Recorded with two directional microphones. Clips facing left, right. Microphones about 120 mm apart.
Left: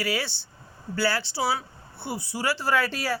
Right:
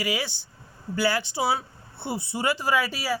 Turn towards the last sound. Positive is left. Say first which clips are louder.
# even
turn(degrees=-10)  # may be behind; listen again after turning